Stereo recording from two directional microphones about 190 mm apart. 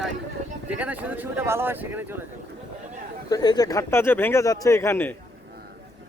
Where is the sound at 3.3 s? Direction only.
20° left (ahead or behind).